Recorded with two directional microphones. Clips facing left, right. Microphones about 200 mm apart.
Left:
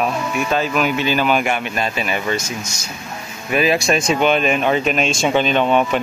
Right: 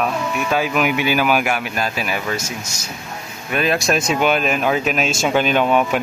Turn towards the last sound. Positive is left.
turn(degrees=-5)  # may be behind; listen again after turning